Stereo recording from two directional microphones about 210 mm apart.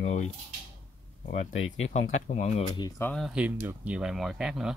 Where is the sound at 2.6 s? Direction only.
20° left (ahead or behind).